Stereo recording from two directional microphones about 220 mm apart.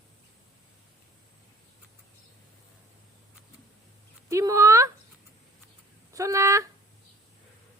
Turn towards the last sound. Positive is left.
turn(degrees=-15)  # may be behind; listen again after turning